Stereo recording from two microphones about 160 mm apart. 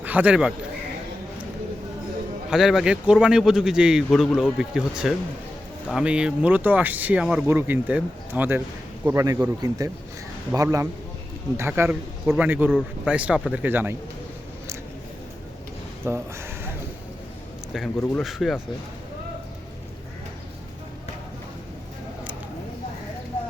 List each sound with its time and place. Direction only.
0.0 s a man's voice: 10° right (ahead or behind)
2.5 s a man's voice: 5° right (ahead or behind)
16.0 s speech: 15° right (ahead or behind)
18.2 s a man's voice: centre (ahead or behind)